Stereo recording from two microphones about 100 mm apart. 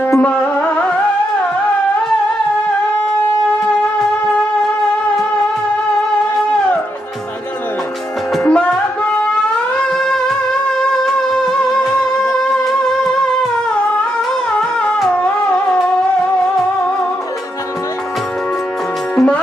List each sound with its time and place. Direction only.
0.0 s music: 15° left (ahead or behind)
8.4 s music: 10° left (ahead or behind)
9.9 s music: 5° left (ahead or behind)
11.8 s music: 35° left (ahead or behind)
12.2 s music: 10° left (ahead or behind)
14.6 s music: 5° left (ahead or behind)
15.1 s music: 15° left (ahead or behind)
19.1 s music: 10° left (ahead or behind)